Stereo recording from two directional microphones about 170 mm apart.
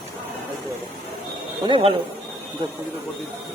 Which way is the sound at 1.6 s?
30° right (ahead or behind).